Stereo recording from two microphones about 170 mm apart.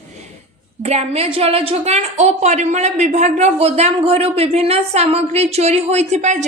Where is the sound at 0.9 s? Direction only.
40° right (ahead or behind).